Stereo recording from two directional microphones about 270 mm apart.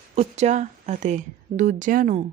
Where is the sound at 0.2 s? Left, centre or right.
Right.